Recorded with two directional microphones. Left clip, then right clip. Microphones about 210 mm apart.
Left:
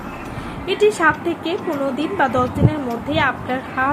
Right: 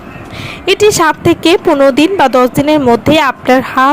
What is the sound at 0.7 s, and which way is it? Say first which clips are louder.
Speech: right 7 dB; 50° right (ahead or behind).